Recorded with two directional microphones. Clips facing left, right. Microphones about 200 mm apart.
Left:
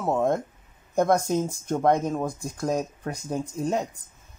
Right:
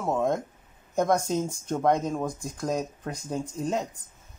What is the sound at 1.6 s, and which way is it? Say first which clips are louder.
Speech: left 2 dB; 10° left (ahead or behind).